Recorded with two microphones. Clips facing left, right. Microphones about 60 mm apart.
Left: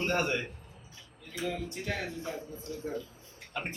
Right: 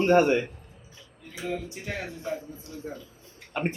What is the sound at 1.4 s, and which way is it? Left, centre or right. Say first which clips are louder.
Music: right 2 dB; centre.